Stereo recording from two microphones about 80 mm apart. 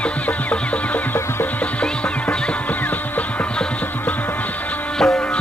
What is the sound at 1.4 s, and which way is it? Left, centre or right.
Music, centre.